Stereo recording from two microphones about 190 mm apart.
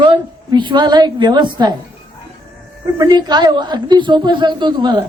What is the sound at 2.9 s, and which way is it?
A woman's voice, 20° right (ahead or behind).